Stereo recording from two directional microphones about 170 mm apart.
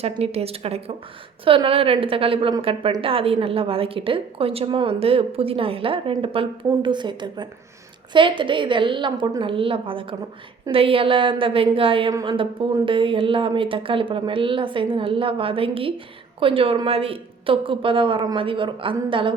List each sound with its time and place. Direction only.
0.2 s a woman's voice: 35° right (ahead or behind)